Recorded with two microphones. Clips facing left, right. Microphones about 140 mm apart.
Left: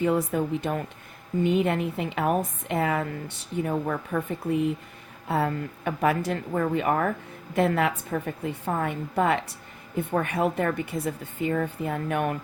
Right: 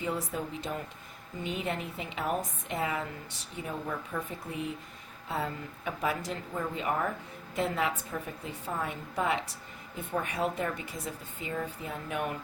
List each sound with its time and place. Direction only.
0.0 s a woman's voice: 60° left (ahead or behind)